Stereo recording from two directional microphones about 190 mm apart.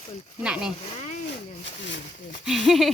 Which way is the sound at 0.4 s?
5° right (ahead or behind).